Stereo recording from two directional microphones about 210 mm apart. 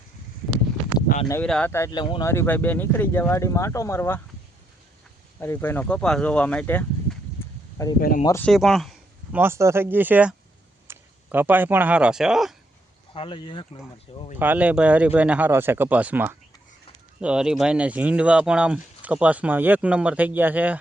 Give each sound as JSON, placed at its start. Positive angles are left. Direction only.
{"t": 1.3, "sound": "speech", "side_deg": 5}
{"t": 5.4, "sound": "speech", "side_deg": 10}
{"t": 7.9, "sound": "speech", "side_deg": 40}
{"t": 8.2, "sound": "speech", "side_deg": 15}
{"t": 8.4, "sound": "a sound", "side_deg": 0}
{"t": 9.4, "sound": "speech", "side_deg": -10}
{"t": 13.1, "sound": "speech", "side_deg": 25}
{"t": 14.3, "sound": "speech", "side_deg": -10}